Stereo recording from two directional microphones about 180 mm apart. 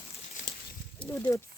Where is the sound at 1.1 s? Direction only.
10° left (ahead or behind).